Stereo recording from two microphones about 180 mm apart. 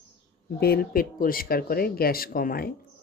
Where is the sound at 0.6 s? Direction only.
55° left (ahead or behind).